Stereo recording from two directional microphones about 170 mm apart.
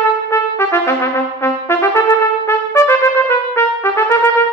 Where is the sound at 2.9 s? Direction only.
15° left (ahead or behind).